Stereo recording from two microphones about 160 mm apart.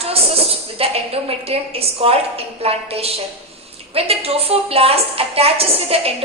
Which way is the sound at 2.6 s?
40° right (ahead or behind).